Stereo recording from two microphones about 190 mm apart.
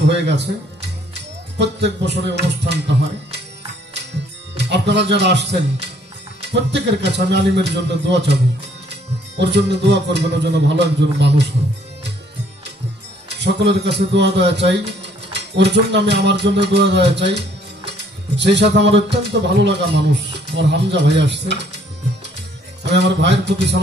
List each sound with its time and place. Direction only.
0.1 s speech: 65° right (ahead or behind)
4.6 s speech: 65° right (ahead or behind)
9.4 s speech: 65° right (ahead or behind)
13.4 s speech: 60° right (ahead or behind)
22.8 s speech: 65° right (ahead or behind)